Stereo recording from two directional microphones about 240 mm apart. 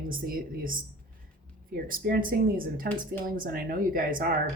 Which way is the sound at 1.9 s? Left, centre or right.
Right.